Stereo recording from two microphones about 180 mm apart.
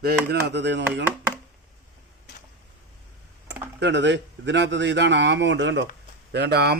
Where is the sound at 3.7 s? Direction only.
80° right.